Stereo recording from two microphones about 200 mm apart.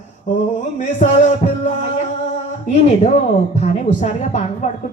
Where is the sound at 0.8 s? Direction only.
35° left (ahead or behind).